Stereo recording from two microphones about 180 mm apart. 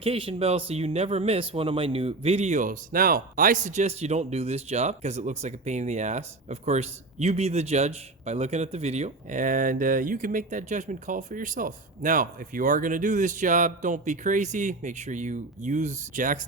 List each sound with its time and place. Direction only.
0.0 s speech: 30° right (ahead or behind); by 16.4 s 45° right (ahead or behind)